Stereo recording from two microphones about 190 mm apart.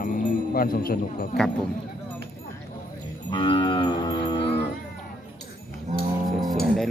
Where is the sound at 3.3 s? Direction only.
25° left (ahead or behind).